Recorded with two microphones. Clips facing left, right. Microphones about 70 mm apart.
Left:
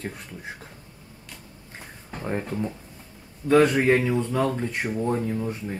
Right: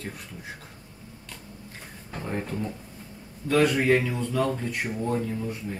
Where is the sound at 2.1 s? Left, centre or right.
Centre.